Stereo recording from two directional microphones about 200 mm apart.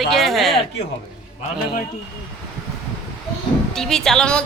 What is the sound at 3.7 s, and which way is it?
Speech, centre (ahead or behind).